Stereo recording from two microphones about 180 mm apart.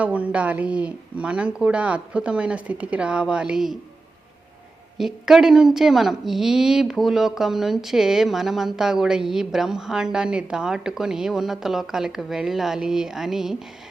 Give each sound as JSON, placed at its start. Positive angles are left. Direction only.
{"t": 0.0, "sound": "speech", "side_deg": -10}
{"t": 4.9, "sound": "a woman's voice", "side_deg": 0}